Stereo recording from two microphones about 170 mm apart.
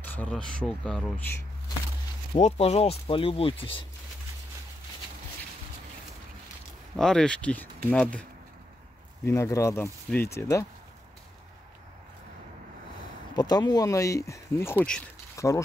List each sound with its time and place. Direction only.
0.0 s a man's voice: 10° left (ahead or behind)
2.3 s speech: 35° left (ahead or behind)
7.0 s a man's voice: 5° left (ahead or behind)
9.2 s a man's voice: 20° left (ahead or behind)
13.3 s speech: 25° left (ahead or behind); by 15.0 s 5° left (ahead or behind)
15.3 s a sound: 20° left (ahead or behind)